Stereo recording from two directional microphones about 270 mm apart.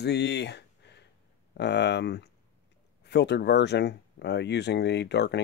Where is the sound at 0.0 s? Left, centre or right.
Left.